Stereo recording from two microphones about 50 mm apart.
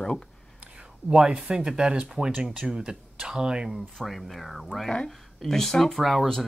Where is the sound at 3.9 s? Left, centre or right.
Centre.